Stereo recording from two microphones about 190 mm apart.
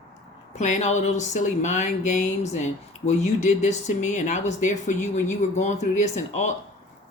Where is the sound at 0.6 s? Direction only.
35° left (ahead or behind).